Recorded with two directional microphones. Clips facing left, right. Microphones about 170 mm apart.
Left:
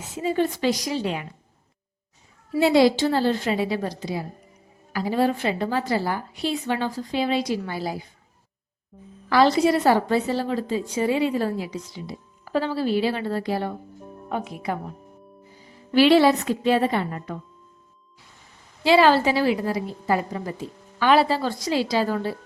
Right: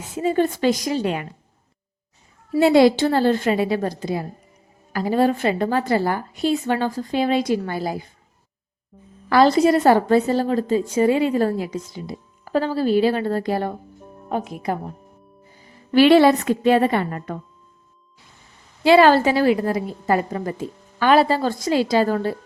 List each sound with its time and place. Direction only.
0.2 s a woman's voice: 50° right (ahead or behind)
2.6 s a woman's voice: 50° right (ahead or behind)
8.9 s a woman's voice: centre (ahead or behind)
9.3 s a woman's voice: 45° right (ahead or behind)
15.9 s a woman's voice: 55° right (ahead or behind)
18.8 s a woman's voice: 55° right (ahead or behind)